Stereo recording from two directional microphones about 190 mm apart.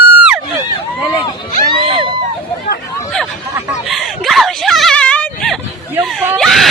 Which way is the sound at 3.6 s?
Centre (ahead or behind).